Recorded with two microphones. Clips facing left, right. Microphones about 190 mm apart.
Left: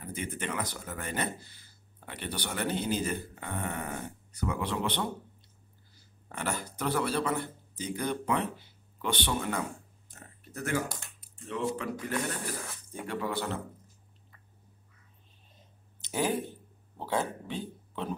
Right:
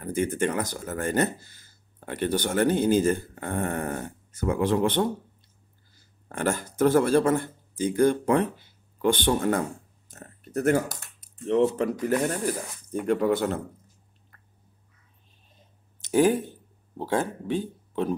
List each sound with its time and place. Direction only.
0.0 s speech: 45° right (ahead or behind)
6.2 s speech: 50° right (ahead or behind)
10.1 s a sound: 45° right (ahead or behind)
11.4 s speech: 40° right (ahead or behind)
16.0 s speech: 50° right (ahead or behind)